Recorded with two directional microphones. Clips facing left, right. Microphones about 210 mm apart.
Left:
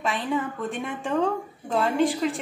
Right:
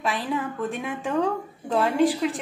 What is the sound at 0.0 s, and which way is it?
A woman's voice, centre (ahead or behind).